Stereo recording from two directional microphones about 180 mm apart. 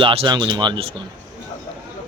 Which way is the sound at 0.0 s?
30° right (ahead or behind).